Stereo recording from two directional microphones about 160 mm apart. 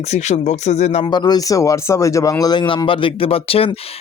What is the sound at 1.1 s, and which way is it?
Speech, 25° left (ahead or behind).